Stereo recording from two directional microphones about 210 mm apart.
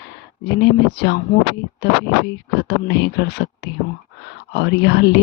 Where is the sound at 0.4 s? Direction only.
55° left (ahead or behind).